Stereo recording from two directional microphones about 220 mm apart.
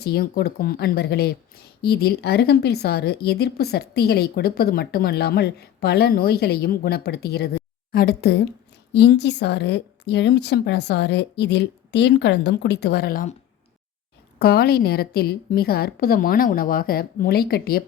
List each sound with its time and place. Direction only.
0.0 s a woman's voice: 45° left (ahead or behind)
14.3 s a woman's voice: 45° left (ahead or behind)